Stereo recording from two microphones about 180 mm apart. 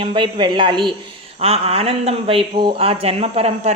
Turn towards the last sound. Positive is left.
turn(degrees=-35)  # may be behind; listen again after turning